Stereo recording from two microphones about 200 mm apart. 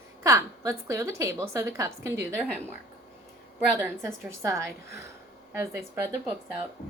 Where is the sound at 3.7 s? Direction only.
15° right (ahead or behind).